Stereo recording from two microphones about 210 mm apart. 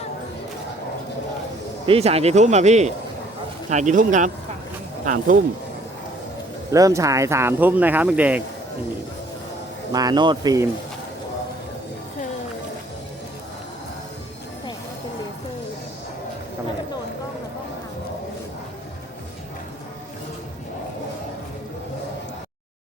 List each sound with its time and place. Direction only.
1.9 s speech: 30° right (ahead or behind)
6.7 s speech: 15° right (ahead or behind)
9.9 s speech: 20° right (ahead or behind)